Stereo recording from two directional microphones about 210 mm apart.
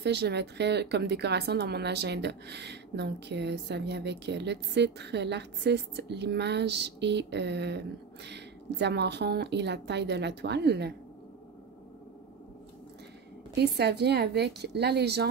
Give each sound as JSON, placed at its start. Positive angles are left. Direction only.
{"t": 0.0, "sound": "speech", "side_deg": -55}
{"t": 13.6, "sound": "speech", "side_deg": -50}